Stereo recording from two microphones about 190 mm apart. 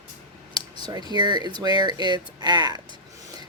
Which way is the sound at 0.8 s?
20° right (ahead or behind).